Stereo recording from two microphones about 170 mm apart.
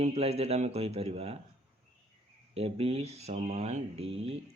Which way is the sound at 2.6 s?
35° right (ahead or behind).